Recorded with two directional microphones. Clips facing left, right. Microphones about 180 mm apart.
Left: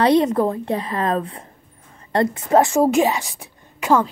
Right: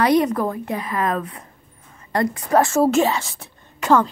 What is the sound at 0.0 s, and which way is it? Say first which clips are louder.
A woman's voice: left 2 dB; 25° left (ahead or behind).